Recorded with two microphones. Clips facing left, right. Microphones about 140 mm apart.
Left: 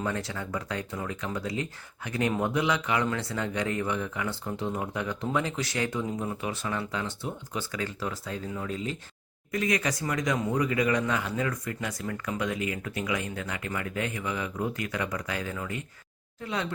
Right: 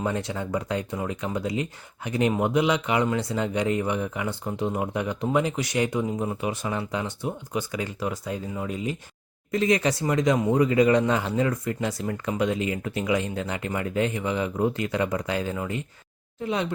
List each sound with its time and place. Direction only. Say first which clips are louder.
0.0 s a man's voice: right 4 dB; 20° right (ahead or behind)
9.5 s a man's voice: right 6 dB; 30° right (ahead or behind)